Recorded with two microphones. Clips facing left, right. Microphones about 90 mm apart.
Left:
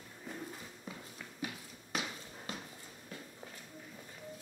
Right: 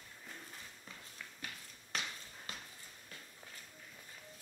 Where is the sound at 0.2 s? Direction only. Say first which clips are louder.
Left 8 dB; 10° left (ahead or behind).